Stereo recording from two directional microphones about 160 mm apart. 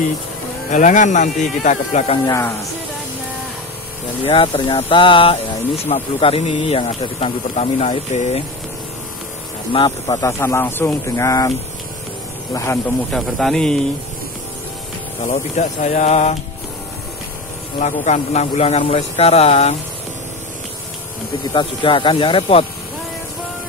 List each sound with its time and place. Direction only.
0.7 s speech: 50° left (ahead or behind)
2.2 s speech: 20° left (ahead or behind)
4.2 s speech: 35° left (ahead or behind)
9.7 s speech: 30° left (ahead or behind)
12.5 s speech: 15° left (ahead or behind)
13.1 s speech: centre (ahead or behind)
15.2 s speech: 45° left (ahead or behind)
17.7 s speech: 45° left (ahead or behind)
21.5 s speech: 30° left (ahead or behind)